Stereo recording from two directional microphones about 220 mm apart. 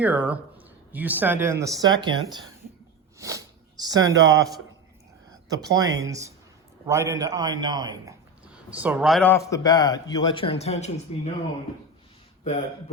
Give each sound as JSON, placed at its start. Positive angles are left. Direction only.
{"t": 0.0, "sound": "speech", "side_deg": -5}
{"t": 8.7, "sound": "a man's voice", "side_deg": -5}